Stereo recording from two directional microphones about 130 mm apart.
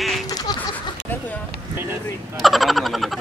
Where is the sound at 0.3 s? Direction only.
30° left (ahead or behind).